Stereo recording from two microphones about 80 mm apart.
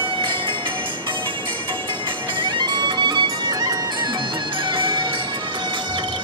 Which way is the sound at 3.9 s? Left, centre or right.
Right.